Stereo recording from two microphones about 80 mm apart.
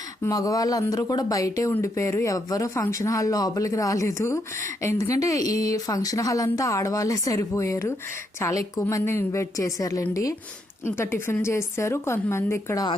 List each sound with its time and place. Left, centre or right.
0.2 s speech: left
10.8 s speech: left